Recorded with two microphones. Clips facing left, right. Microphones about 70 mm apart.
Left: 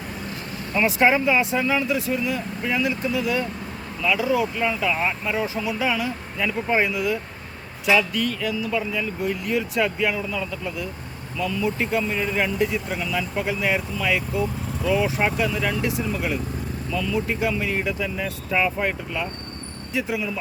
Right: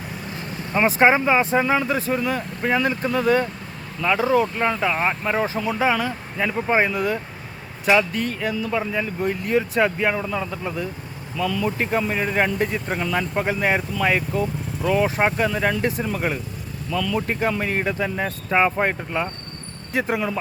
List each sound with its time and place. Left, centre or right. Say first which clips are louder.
0.7 s speech: right 2 dB; right
6.3 s speech: right 2 dB; right
6.8 s speech: right 1 dB; right
11.6 s speech: left 1 dB; right
16.9 s speech: right 2 dB; right
17.2 s speech: right 1 dB; right
19.9 s speech: right 3 dB; right